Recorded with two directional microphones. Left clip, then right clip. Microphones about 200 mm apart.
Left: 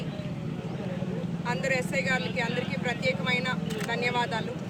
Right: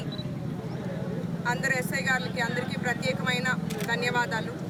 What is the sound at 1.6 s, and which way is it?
Speech, 5° right (ahead or behind).